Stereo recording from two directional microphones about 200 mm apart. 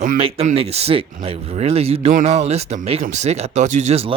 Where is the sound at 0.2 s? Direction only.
30° right (ahead or behind).